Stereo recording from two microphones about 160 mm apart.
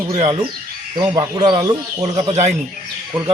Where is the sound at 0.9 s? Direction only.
25° right (ahead or behind).